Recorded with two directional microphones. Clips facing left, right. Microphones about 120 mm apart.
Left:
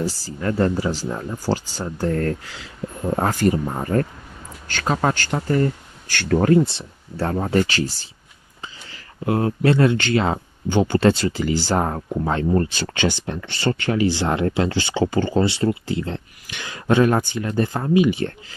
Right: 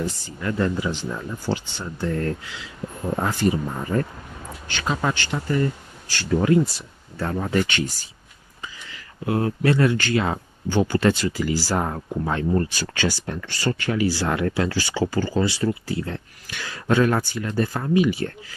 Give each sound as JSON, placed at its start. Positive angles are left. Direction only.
{"t": 0.0, "sound": "speech", "side_deg": 35}
{"t": 6.5, "sound": "speech", "side_deg": 25}